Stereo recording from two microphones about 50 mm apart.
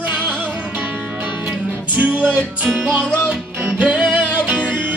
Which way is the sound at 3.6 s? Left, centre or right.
Right.